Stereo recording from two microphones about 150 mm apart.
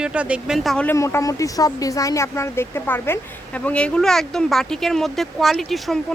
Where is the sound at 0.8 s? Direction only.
20° left (ahead or behind).